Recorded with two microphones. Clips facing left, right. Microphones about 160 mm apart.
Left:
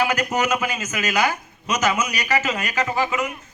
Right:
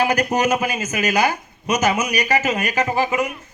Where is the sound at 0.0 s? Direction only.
30° right (ahead or behind).